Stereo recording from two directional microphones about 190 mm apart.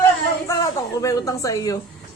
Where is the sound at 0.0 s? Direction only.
15° left (ahead or behind).